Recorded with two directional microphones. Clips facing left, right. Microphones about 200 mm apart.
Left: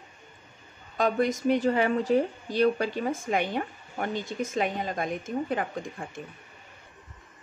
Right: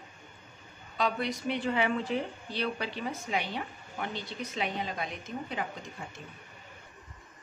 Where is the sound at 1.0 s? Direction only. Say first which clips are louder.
Left 6 dB; 45° left (ahead or behind).